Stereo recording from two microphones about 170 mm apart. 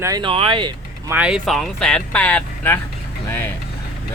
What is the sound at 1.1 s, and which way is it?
Speech, 5° right (ahead or behind).